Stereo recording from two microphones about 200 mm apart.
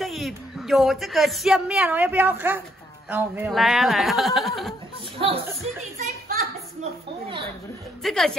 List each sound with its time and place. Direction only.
0.0 s speech: centre (ahead or behind)
5.2 s speech: 30° right (ahead or behind)
6.2 s children playing: 45° right (ahead or behind)
8.0 s speech: centre (ahead or behind)